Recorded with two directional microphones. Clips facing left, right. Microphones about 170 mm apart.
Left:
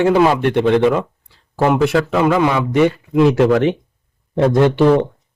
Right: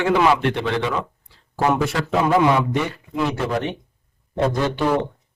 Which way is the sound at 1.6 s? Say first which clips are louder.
Left 6 dB; 65° left (ahead or behind).